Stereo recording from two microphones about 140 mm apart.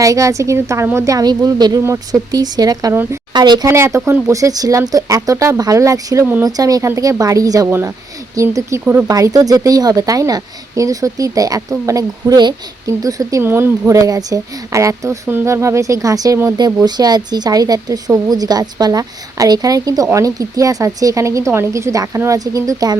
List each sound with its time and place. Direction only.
0.0 s speech: 25° right (ahead or behind)
3.7 s speech: 20° right (ahead or behind)
8.8 s speech: 10° right (ahead or behind)
9.0 s speech: 25° right (ahead or behind)